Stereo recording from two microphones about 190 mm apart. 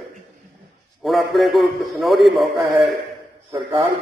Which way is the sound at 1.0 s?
Centre (ahead or behind).